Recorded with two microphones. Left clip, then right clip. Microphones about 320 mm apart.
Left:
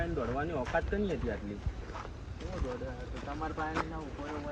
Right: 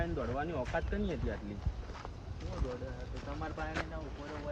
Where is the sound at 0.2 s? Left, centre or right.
Centre.